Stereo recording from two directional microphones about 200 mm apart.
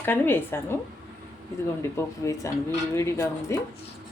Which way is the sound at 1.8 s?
15° left (ahead or behind).